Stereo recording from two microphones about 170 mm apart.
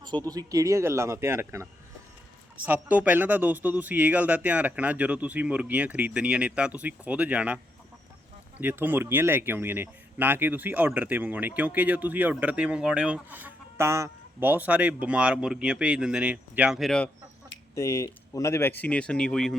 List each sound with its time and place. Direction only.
0.3 s speech: 20° right (ahead or behind)
2.6 s speech: 10° right (ahead or behind)
8.6 s speech: 10° right (ahead or behind)
17.7 s speech: 20° left (ahead or behind); by 19.5 s 5° left (ahead or behind)